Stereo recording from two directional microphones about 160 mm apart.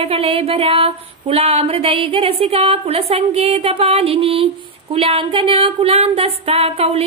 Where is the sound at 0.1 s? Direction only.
35° right (ahead or behind).